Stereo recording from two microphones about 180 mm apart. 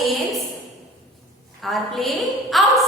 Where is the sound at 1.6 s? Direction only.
Centre (ahead or behind).